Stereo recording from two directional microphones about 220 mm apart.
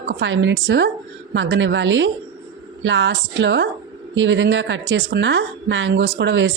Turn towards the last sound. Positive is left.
turn(degrees=-55)  # may be behind; listen again after turning